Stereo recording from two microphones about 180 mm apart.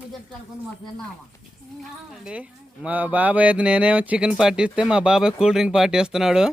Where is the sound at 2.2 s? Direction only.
5° right (ahead or behind).